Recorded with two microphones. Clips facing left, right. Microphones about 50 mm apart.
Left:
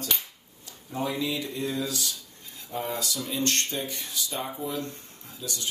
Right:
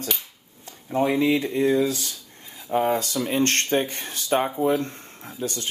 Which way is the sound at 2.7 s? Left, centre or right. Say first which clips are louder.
Right 9 dB; right.